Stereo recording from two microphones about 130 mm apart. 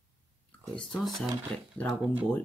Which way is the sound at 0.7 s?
5° left (ahead or behind).